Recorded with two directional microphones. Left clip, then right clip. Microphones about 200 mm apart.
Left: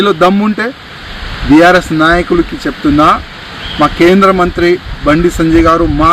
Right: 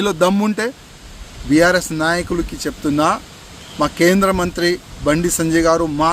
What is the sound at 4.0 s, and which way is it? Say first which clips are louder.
Speech: left 8 dB; 30° right (ahead or behind).